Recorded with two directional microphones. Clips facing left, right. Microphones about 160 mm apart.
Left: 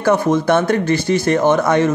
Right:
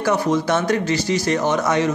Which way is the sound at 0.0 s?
50° left (ahead or behind).